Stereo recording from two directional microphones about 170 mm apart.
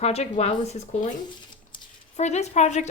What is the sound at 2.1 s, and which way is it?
Speech, 40° left (ahead or behind).